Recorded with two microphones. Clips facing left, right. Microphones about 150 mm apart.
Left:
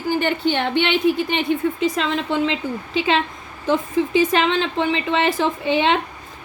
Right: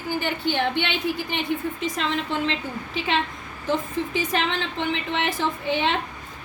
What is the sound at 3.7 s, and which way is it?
Speech, 90° left.